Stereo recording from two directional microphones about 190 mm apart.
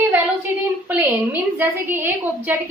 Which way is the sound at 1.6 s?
10° right (ahead or behind).